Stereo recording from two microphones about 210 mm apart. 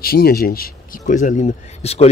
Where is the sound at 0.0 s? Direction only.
45° left (ahead or behind).